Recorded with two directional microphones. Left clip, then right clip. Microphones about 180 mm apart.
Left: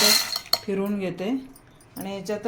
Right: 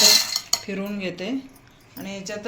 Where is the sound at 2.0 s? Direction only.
60° left (ahead or behind).